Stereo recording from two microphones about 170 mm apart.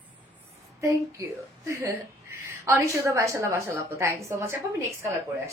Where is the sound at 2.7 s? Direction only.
15° right (ahead or behind).